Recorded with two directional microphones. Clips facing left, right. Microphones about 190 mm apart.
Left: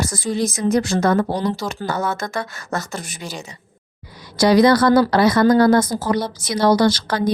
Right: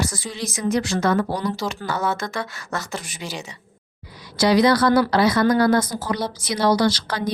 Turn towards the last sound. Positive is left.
turn(degrees=50)  # may be behind; listen again after turning